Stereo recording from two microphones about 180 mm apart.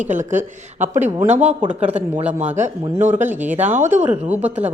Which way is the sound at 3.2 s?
10° right (ahead or behind).